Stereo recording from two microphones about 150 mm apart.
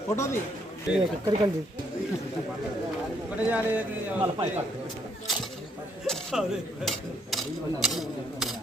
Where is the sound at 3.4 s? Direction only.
10° right (ahead or behind).